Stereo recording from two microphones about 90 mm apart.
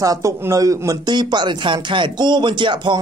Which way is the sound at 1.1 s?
55° right (ahead or behind).